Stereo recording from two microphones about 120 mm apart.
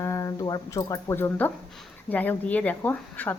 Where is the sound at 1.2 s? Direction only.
15° left (ahead or behind).